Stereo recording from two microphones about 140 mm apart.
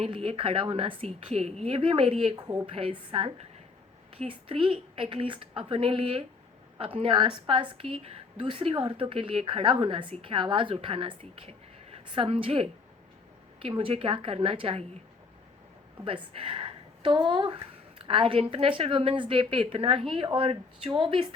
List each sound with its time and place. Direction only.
0.0 s a woman's voice: 45° right (ahead or behind)
16.0 s a woman's voice: 40° right (ahead or behind)